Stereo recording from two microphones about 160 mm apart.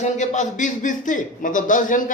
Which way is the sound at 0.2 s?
50° left (ahead or behind).